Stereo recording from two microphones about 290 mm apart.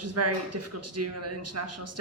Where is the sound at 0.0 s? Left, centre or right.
Right.